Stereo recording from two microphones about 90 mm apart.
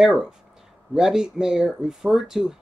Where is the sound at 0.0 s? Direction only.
5° right (ahead or behind).